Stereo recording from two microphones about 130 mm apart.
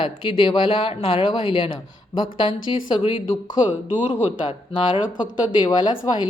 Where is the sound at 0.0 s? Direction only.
40° left (ahead or behind).